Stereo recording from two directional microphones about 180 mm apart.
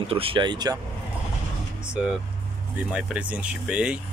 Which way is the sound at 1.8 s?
5° right (ahead or behind).